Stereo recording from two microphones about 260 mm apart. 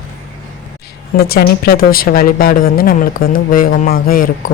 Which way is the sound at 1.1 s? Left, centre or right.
Left.